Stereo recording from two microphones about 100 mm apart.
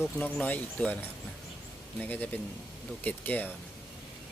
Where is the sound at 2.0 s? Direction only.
15° left (ahead or behind).